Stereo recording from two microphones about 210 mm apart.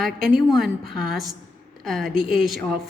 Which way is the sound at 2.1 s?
45° right (ahead or behind).